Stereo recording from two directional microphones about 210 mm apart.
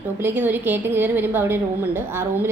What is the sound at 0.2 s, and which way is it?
A woman's voice, 10° right (ahead or behind).